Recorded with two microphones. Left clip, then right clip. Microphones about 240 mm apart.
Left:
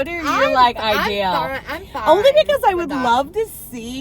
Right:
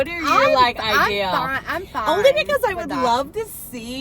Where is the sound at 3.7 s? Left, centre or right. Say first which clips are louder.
Even; centre.